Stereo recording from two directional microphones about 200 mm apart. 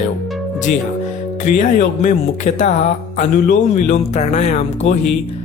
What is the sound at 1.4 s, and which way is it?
Speech, 35° left (ahead or behind).